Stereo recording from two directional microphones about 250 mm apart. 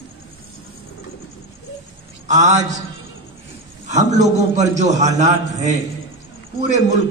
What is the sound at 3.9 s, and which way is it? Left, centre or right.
A man's voice, right.